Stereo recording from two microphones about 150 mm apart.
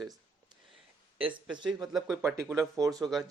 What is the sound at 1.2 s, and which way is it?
Speech, 10° right (ahead or behind).